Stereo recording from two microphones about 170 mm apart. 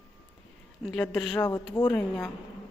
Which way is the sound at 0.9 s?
5° left (ahead or behind).